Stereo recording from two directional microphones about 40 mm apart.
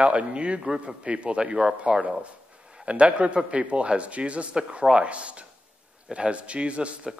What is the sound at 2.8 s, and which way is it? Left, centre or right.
A man's voice, right.